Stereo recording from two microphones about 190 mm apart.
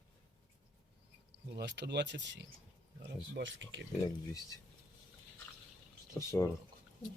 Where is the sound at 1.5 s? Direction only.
60° right (ahead or behind).